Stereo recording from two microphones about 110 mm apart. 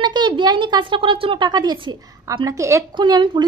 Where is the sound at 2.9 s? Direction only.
45° right (ahead or behind).